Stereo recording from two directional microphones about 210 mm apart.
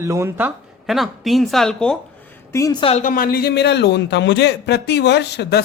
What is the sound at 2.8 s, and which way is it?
A man's voice, 35° left (ahead or behind).